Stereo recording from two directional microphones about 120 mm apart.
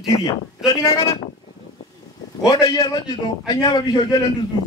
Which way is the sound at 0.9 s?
50° left (ahead or behind).